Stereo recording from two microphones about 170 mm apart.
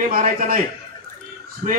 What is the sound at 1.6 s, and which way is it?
Speech, 50° right (ahead or behind).